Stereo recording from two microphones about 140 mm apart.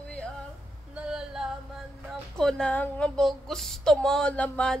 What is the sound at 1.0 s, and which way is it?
Female singing, 5° right (ahead or behind).